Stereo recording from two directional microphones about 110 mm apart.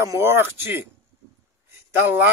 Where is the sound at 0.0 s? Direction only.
25° right (ahead or behind).